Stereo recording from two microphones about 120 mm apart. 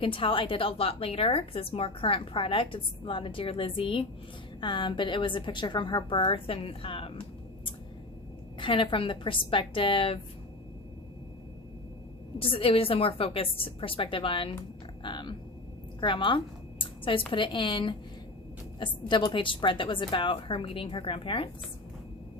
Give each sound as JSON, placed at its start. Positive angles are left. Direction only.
{"t": 0.0, "sound": "a woman's voice", "side_deg": 50}
{"t": 12.4, "sound": "a woman's voice", "side_deg": 50}
{"t": 15.0, "sound": "a sound", "side_deg": 40}
{"t": 16.0, "sound": "a woman's voice", "side_deg": 45}